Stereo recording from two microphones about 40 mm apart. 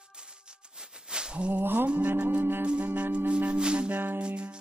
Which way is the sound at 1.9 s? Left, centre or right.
Right.